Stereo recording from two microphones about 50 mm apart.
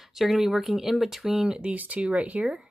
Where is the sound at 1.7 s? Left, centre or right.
Right.